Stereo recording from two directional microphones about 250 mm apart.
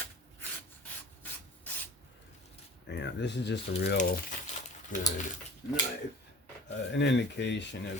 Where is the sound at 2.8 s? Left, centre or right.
Left.